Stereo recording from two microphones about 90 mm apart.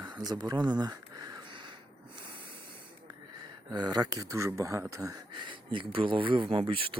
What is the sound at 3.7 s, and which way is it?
Speech, 50° right (ahead or behind).